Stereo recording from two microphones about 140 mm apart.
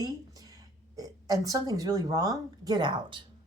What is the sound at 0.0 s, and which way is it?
Speech, 25° right (ahead or behind).